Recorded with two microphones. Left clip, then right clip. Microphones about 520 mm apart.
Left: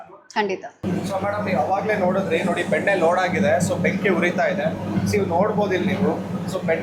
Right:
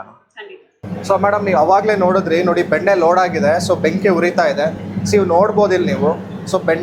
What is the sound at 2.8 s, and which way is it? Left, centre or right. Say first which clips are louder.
Speech: right 6 dB; right.